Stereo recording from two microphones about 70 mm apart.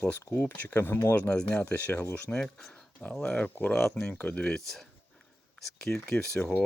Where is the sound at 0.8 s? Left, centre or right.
Left.